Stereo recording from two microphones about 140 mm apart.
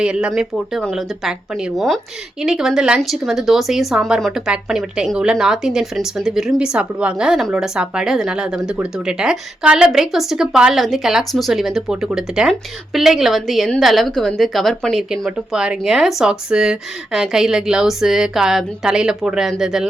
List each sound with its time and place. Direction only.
0.0 s speech: 5° right (ahead or behind)